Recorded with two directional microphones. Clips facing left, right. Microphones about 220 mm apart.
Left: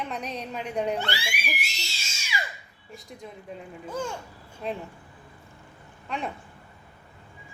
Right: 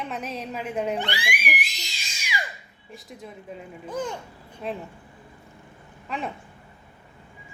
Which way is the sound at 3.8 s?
15° right (ahead or behind).